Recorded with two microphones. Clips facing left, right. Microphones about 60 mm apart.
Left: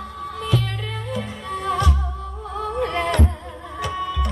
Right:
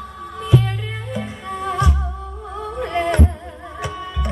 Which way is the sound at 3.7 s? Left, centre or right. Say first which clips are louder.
Left 3 dB; right.